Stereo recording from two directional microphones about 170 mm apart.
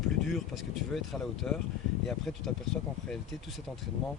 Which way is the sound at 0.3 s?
Centre (ahead or behind).